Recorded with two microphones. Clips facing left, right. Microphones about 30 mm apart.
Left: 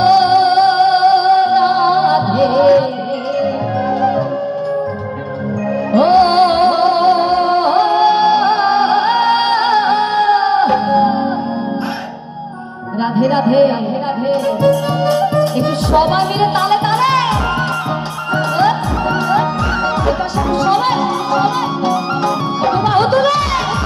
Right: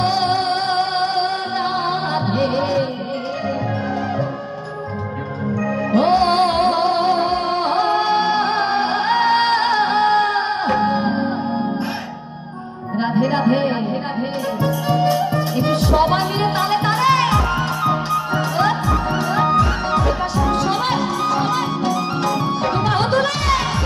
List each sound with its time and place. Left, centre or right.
0.0 s music: centre
5.9 s music: centre
10.3 s music: left
13.0 s a sound: left
14.6 s music: left
15.6 s music: centre